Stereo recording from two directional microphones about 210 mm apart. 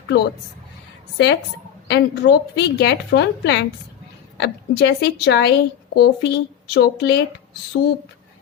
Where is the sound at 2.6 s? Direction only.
55° left (ahead or behind).